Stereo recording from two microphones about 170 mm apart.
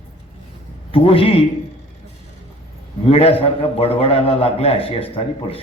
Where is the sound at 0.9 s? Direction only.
35° left (ahead or behind).